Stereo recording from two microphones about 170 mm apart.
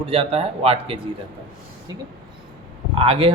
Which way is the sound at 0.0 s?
35° right (ahead or behind).